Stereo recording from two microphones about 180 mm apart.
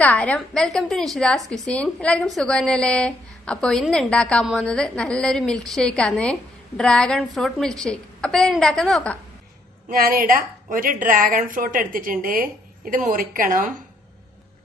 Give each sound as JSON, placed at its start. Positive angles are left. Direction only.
{"t": 0.0, "sound": "a woman's voice", "side_deg": 10}
{"t": 9.9, "sound": "speech", "side_deg": -50}